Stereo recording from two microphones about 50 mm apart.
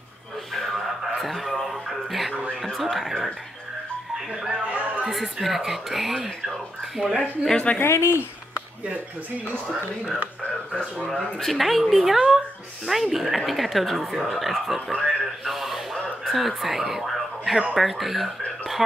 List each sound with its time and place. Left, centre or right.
0.5 s music: centre
2.7 s speech: centre
4.6 s a sound: right
5.0 s speech: centre
7.2 s speech: centre
7.8 s speech: left
11.3 s speech: centre
15.0 s a sound: centre
17.7 s speech: centre